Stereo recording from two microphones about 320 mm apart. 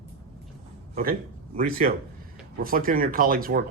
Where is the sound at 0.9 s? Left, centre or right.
Right.